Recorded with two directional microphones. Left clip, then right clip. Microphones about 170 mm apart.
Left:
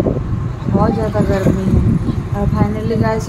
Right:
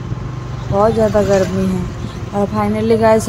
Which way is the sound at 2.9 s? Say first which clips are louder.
Right 9 dB; 40° right (ahead or behind).